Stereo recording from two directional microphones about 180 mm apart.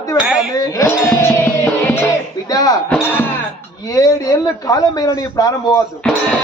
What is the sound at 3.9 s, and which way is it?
A man's voice, 20° left (ahead or behind).